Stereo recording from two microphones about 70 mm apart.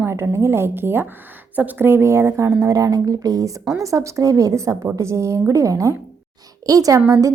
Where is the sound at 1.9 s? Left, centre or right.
Right.